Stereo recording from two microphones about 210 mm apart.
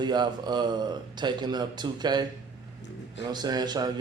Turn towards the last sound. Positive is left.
turn(degrees=-20)  # may be behind; listen again after turning